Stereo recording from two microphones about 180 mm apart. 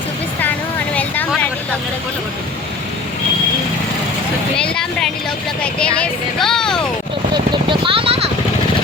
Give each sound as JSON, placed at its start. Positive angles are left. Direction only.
{"t": 0.9, "sound": "vehicle", "side_deg": 10}
{"t": 4.5, "sound": "speech", "side_deg": 5}
{"t": 7.5, "sound": "vehicle", "side_deg": -30}